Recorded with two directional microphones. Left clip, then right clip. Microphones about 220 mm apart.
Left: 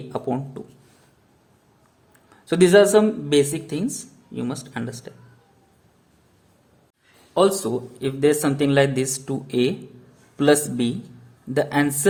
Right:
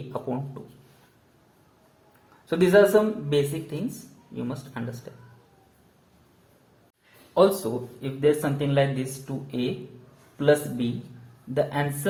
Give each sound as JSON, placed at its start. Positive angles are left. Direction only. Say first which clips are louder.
{"t": 0.1, "sound": "speech", "louder": "left 5 dB", "side_deg": 45}
{"t": 2.5, "sound": "speech", "louder": "left 4 dB", "side_deg": 45}
{"t": 7.3, "sound": "speech", "louder": "left 2 dB", "side_deg": 35}
{"t": 8.0, "sound": "speech", "louder": "left 4 dB", "side_deg": 50}